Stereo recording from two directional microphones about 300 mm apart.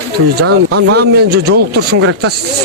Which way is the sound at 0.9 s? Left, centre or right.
Right.